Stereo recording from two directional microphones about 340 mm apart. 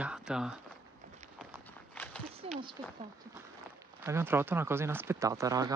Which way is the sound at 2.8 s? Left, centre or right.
Centre.